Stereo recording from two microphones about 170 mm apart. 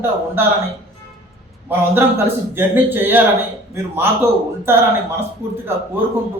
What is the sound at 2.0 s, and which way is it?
A man's voice, 15° right (ahead or behind).